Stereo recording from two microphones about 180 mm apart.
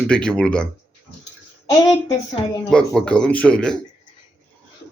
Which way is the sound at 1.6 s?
20° left (ahead or behind).